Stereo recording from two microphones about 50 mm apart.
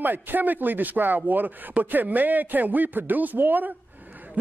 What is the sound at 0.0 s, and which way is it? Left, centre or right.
A man's voice, right.